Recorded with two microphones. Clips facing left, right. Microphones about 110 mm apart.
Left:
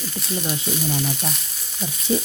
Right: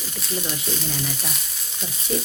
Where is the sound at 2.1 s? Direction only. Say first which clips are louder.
Left 4 dB; 25° left (ahead or behind).